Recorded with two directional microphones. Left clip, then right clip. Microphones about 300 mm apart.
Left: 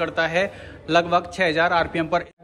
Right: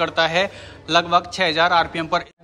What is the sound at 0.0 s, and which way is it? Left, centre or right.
A man's voice, centre.